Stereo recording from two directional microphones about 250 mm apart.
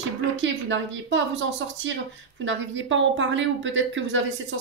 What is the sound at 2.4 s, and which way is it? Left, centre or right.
A woman's voice, right.